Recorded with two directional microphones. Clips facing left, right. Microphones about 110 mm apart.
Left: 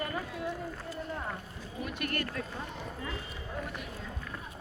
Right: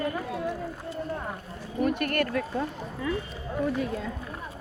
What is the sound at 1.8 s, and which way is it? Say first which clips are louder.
Speech: right 10 dB; 50° right (ahead or behind).